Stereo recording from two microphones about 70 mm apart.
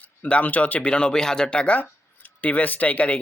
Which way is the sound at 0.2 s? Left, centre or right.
Left.